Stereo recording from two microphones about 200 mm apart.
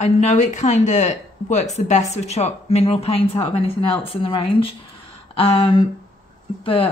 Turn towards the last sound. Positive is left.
turn(degrees=25)  # may be behind; listen again after turning